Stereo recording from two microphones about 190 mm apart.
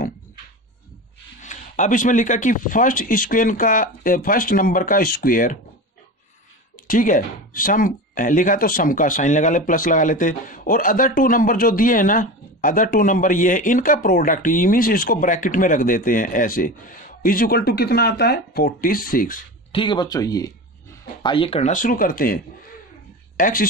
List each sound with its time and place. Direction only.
1.4 s speech: 40° left (ahead or behind)
6.9 s speech: 45° left (ahead or behind)
19.7 s speech: 25° left (ahead or behind); by 23.7 s 45° left (ahead or behind)